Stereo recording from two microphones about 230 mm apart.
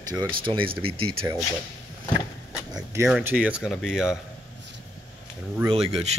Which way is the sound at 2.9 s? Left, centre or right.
Centre.